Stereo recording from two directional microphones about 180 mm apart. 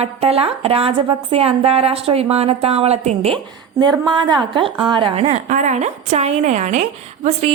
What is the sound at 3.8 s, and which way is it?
A woman's voice, 25° right (ahead or behind).